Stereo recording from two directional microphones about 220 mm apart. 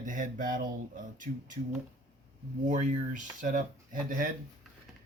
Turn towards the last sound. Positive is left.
turn(degrees=-40)  # may be behind; listen again after turning